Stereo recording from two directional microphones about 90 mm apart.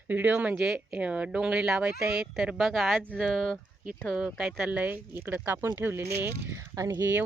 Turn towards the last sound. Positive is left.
turn(degrees=-35)  # may be behind; listen again after turning